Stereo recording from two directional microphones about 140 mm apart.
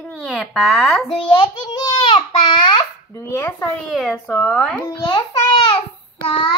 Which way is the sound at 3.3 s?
15° left (ahead or behind).